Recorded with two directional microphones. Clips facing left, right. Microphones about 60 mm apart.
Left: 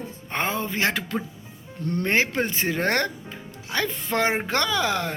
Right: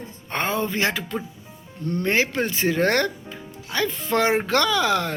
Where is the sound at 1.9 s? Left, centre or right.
Left.